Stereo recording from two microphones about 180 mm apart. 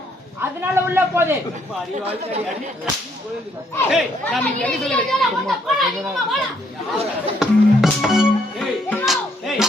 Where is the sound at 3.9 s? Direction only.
Centre (ahead or behind).